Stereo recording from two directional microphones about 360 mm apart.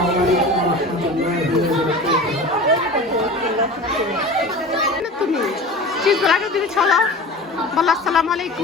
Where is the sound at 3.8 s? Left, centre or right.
Centre.